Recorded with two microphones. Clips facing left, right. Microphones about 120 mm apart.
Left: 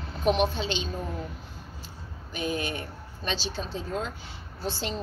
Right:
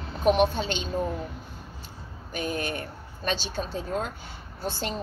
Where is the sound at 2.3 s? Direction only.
50° right (ahead or behind).